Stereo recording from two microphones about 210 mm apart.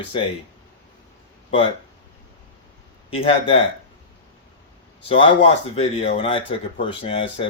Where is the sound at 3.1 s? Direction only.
25° left (ahead or behind).